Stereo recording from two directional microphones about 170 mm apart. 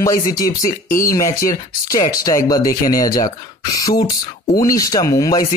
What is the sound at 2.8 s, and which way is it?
Speech, 55° left (ahead or behind).